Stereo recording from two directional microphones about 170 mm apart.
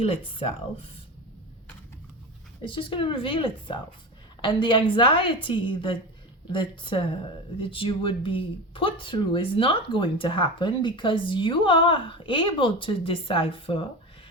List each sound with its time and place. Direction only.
0.0 s speech: 35° left (ahead or behind)
2.6 s a woman's voice: 30° left (ahead or behind)